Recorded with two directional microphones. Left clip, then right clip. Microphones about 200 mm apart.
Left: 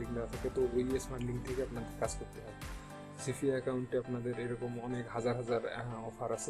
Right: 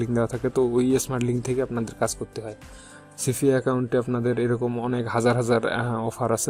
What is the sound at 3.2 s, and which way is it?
Speech, 45° right (ahead or behind).